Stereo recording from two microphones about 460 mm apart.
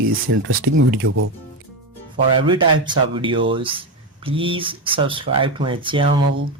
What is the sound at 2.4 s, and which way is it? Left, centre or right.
Speech, centre.